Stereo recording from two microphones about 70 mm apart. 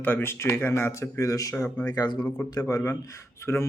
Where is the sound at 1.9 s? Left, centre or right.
Left.